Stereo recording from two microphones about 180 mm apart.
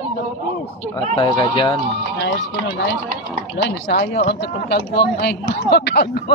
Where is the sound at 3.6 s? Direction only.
75° left (ahead or behind).